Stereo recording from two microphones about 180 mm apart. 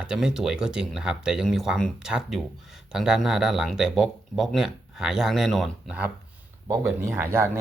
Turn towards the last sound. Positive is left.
turn(degrees=-15)  # may be behind; listen again after turning